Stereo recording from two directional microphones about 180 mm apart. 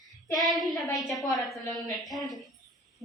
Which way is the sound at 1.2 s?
20° left (ahead or behind).